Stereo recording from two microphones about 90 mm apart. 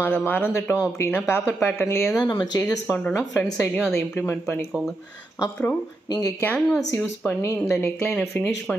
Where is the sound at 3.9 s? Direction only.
25° left (ahead or behind).